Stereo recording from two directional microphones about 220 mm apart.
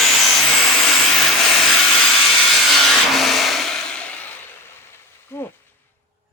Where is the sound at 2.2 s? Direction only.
Centre (ahead or behind).